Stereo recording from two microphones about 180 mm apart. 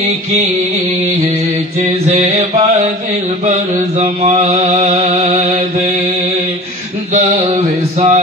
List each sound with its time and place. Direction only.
2.0 s mantra: 35° right (ahead or behind)
7.2 s mantra: 35° right (ahead or behind)